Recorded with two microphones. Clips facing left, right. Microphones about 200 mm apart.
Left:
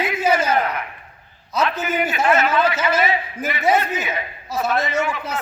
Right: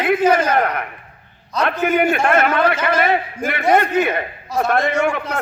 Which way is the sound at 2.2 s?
60° right (ahead or behind).